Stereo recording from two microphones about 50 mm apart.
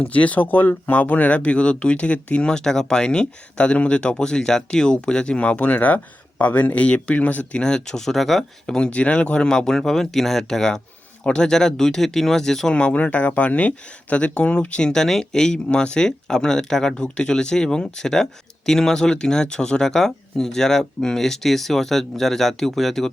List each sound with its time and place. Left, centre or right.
0.1 s speech: left
7.6 s speech: centre
8.9 s speech: left; by 12.7 s centre
12.7 s speech: left; by 23.1 s centre